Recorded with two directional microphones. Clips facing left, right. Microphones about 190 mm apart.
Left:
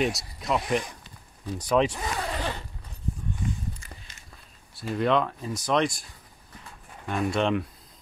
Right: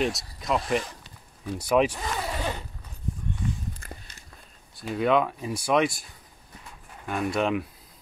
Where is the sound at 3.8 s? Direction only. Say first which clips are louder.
Right 5 dB; 55° right (ahead or behind).